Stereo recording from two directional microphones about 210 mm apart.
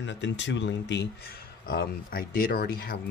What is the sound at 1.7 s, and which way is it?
Speech, 45° left (ahead or behind).